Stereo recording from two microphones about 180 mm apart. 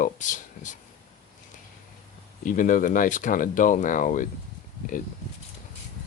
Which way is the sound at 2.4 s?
45° left (ahead or behind).